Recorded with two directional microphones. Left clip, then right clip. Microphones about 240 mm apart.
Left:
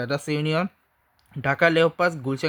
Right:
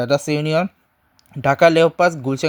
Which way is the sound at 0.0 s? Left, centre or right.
Centre.